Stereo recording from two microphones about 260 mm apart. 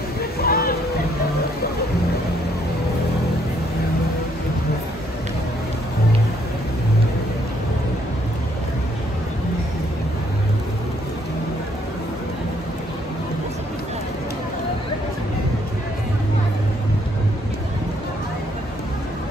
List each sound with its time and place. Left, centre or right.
0.4 s hubbub: left